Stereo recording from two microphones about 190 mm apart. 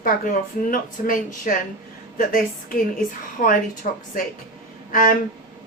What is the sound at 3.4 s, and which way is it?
A woman's voice, 45° left (ahead or behind).